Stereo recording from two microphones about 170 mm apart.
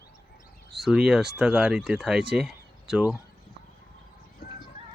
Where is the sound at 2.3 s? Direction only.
Centre (ahead or behind).